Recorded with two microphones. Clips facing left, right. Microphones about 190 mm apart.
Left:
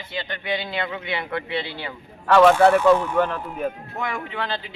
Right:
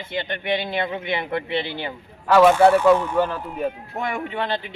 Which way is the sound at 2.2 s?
10° right (ahead or behind).